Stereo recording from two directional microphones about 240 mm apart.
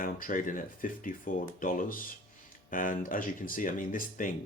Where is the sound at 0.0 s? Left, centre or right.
Left.